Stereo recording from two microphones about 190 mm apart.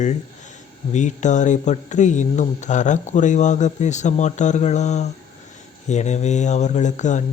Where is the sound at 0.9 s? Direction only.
40° left (ahead or behind).